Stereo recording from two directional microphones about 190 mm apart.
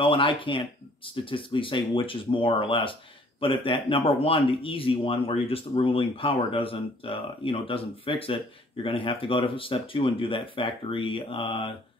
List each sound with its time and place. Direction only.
0.0 s speech: 25° left (ahead or behind)